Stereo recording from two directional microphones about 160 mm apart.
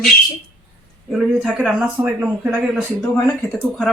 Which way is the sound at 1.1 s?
5° right (ahead or behind).